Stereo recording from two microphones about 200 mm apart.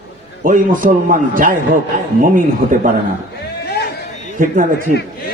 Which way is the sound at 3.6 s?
55° left (ahead or behind).